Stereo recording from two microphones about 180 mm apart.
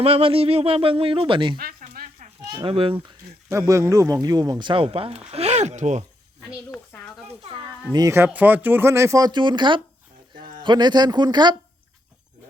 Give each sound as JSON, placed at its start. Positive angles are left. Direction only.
{"t": 0.0, "sound": "speech", "side_deg": -30}
{"t": 3.5, "sound": "speech", "side_deg": -15}
{"t": 6.7, "sound": "a sound", "side_deg": 5}
{"t": 7.9, "sound": "speech", "side_deg": -15}